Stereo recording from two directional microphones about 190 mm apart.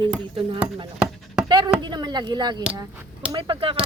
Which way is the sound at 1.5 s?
25° right (ahead or behind).